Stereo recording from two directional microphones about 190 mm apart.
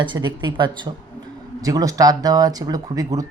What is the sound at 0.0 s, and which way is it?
Speech, 25° right (ahead or behind).